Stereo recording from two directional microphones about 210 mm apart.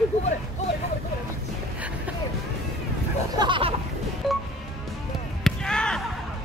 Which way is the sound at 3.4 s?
25° right (ahead or behind).